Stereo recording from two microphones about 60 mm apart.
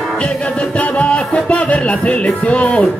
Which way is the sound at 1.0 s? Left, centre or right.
Left.